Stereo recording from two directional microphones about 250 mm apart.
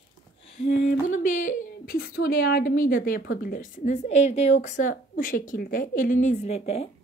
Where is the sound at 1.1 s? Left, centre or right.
Left.